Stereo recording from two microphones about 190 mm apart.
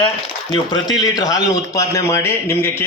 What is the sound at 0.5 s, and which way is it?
A man's voice, 20° left (ahead or behind).